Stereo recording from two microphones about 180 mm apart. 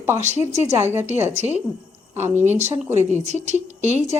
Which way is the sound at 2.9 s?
40° right (ahead or behind).